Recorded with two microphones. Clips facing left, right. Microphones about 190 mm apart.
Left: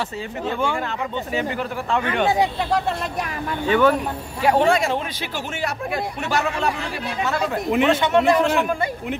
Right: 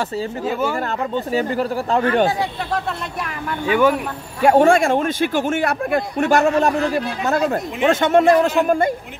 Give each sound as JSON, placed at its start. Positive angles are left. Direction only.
{"t": 0.5, "sound": "speech", "side_deg": -5}
{"t": 0.8, "sound": "speech", "side_deg": -40}
{"t": 3.6, "sound": "speech", "side_deg": -10}
{"t": 4.4, "sound": "speech", "side_deg": -50}